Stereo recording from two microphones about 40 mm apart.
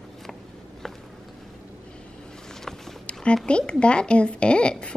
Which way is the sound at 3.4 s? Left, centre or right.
Left.